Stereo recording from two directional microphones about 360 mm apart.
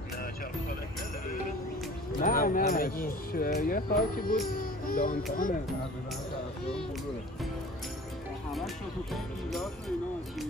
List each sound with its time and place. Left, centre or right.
2.1 s speech: left
9.1 s speech: centre